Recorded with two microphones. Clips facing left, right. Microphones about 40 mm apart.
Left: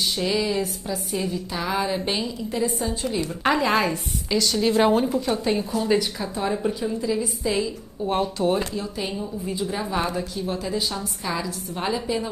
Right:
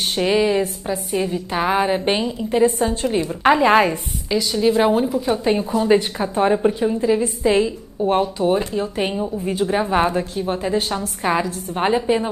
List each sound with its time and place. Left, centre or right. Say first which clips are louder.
0.0 s a woman's voice: right 6 dB; right
3.2 s a woman's voice: right 6 dB; right
3.6 s a woman's voice: right 7 dB; right
4.3 s a woman's voice: right 4 dB; centre
5.2 s a woman's voice: right 4 dB; right
8.4 s a woman's voice: right 4 dB; centre
8.7 s a woman's voice: right 7 dB; right